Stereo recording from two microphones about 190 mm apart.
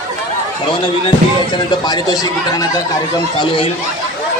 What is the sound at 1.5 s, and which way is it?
A man's voice, 20° left (ahead or behind).